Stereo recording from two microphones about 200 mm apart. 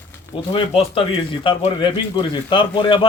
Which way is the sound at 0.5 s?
25° left (ahead or behind).